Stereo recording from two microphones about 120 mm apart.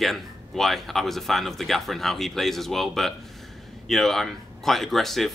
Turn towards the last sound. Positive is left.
turn(degrees=0)  # may be behind; listen again after turning